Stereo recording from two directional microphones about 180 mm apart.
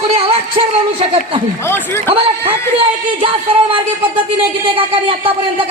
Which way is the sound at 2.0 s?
30° right (ahead or behind).